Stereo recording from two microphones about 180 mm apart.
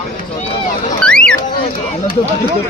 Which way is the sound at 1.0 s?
5° left (ahead or behind).